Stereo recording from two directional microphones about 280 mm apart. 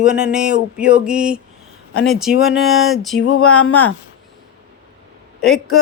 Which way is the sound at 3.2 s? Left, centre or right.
Left.